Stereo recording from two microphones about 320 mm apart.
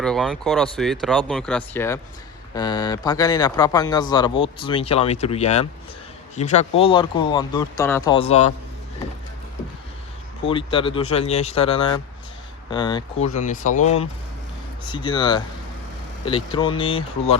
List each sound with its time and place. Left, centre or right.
0.0 s speech: centre
10.4 s speech: centre
14.8 s speech: centre